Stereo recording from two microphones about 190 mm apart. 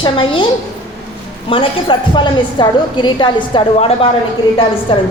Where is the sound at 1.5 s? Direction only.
25° left (ahead or behind).